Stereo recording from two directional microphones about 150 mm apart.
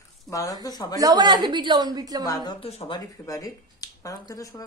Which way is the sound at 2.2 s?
25° left (ahead or behind).